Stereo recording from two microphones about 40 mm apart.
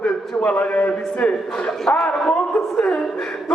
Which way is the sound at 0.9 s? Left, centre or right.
Left.